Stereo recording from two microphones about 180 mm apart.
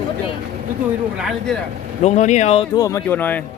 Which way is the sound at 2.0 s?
40° left (ahead or behind).